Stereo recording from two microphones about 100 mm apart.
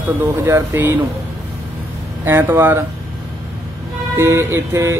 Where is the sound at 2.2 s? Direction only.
25° right (ahead or behind).